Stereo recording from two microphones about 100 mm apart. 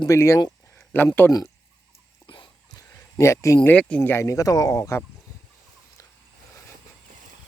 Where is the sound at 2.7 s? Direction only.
30° left (ahead or behind).